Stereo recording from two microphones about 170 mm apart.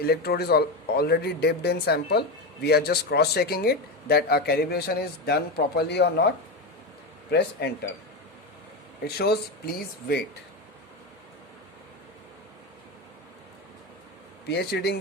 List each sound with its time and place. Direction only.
0.0 s speech: 65° left (ahead or behind)
9.0 s speech: 70° left (ahead or behind)
14.5 s speech: 75° left (ahead or behind)